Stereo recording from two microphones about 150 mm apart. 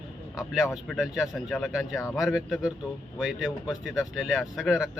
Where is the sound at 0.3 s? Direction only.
5° right (ahead or behind).